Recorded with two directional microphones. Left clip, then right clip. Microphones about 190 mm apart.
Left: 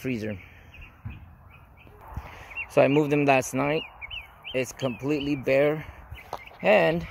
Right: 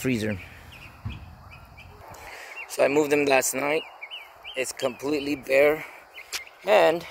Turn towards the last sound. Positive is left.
turn(degrees=5)  # may be behind; listen again after turning